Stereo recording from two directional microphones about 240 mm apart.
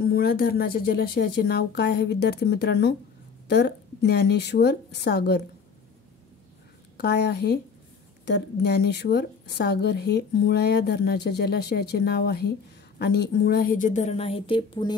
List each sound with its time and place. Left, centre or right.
0.0 s a woman's voice: left
7.0 s a woman's voice: left; by 15.0 s centre